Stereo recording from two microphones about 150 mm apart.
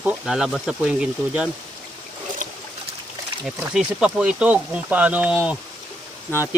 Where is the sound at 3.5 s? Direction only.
5° right (ahead or behind).